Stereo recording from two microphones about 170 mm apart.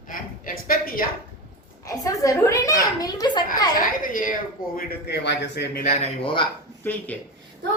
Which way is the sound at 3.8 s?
55° left (ahead or behind).